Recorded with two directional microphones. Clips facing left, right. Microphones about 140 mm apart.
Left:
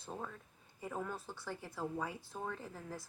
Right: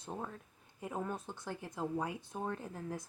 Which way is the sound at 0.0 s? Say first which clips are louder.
Right 2 dB; 20° right (ahead or behind).